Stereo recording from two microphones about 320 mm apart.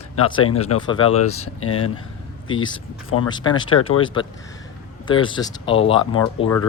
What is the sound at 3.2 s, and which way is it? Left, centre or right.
Speech, centre.